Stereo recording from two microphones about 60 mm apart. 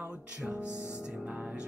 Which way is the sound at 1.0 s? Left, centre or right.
Centre.